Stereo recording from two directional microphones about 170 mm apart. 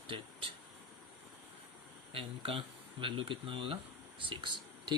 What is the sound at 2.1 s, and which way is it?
Speech, 30° right (ahead or behind).